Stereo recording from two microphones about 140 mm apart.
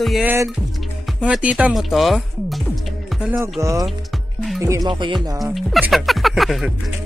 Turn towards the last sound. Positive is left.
turn(degrees=0)  # may be behind; listen again after turning